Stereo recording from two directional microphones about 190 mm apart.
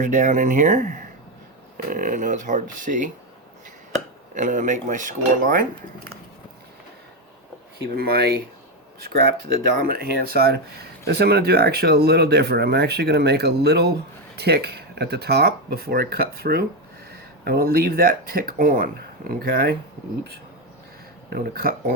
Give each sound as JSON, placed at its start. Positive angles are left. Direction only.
{"t": 0.0, "sound": "speech", "side_deg": -40}
{"t": 4.4, "sound": "speech", "side_deg": -40}
{"t": 7.9, "sound": "speech", "side_deg": -55}
{"t": 9.8, "sound": "speech", "side_deg": -50}
{"t": 21.2, "sound": "speech", "side_deg": -50}